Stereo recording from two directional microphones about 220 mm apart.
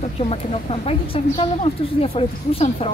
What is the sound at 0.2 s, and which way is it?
A woman's voice, 25° left (ahead or behind).